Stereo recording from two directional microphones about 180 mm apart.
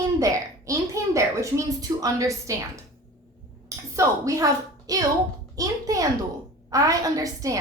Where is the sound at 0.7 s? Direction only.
15° right (ahead or behind).